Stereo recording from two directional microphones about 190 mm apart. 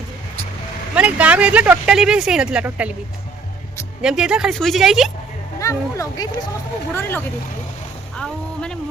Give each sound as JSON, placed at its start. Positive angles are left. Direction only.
{"t": 0.9, "sound": "speech", "side_deg": -5}
{"t": 4.0, "sound": "a woman's voice", "side_deg": -5}
{"t": 5.5, "sound": "speech", "side_deg": 15}